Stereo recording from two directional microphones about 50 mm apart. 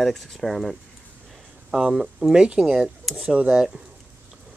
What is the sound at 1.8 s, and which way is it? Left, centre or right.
Speech, centre.